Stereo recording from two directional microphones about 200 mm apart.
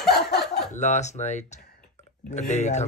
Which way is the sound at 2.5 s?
35° left (ahead or behind).